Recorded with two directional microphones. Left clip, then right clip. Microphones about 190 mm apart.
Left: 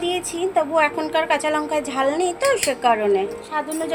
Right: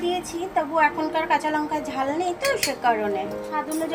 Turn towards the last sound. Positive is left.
turn(degrees=65)  # may be behind; listen again after turning